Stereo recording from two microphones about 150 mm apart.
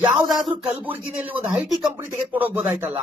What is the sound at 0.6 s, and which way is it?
Speech, 10° right (ahead or behind).